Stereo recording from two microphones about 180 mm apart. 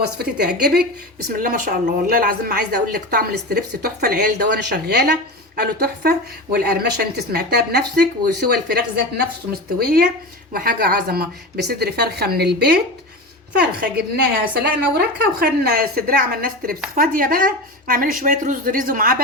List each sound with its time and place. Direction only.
0.0 s a woman's voice: 65° right (ahead or behind)